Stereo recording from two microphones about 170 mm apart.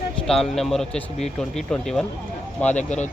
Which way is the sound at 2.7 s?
45° left (ahead or behind).